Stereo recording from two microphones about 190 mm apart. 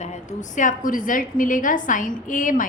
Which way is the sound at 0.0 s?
40° left (ahead or behind).